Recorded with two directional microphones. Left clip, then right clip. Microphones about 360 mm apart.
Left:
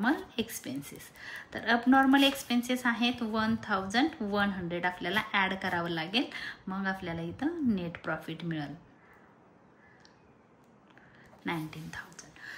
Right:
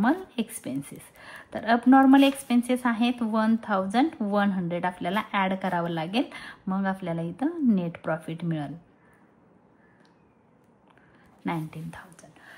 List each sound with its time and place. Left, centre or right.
0.0 s a woman's voice: centre
11.4 s whispering: centre